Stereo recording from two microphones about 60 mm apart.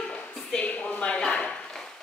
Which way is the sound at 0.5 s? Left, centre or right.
Centre.